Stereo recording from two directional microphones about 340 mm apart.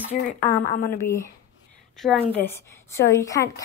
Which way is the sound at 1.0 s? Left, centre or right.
Centre.